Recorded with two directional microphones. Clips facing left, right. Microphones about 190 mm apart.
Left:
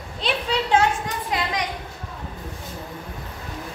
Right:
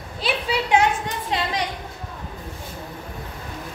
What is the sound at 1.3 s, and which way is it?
Speech, 30° right (ahead or behind).